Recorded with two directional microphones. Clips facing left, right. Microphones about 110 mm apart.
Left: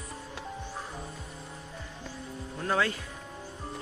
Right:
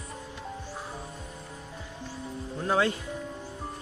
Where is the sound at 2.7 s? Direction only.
20° right (ahead or behind).